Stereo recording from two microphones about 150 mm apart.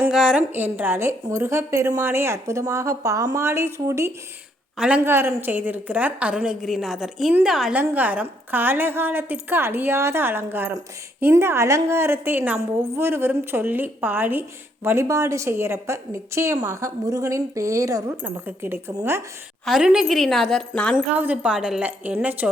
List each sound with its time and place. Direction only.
0.1 s a woman's voice: 5° right (ahead or behind)
19.6 s a woman's voice: 5° right (ahead or behind)
20.9 s a woman's voice: 10° right (ahead or behind)